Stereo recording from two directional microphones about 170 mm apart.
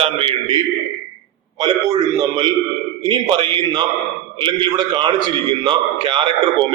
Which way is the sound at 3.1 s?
25° right (ahead or behind).